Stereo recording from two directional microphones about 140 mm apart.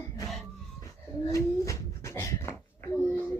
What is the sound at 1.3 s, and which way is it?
Dog, 25° left (ahead or behind).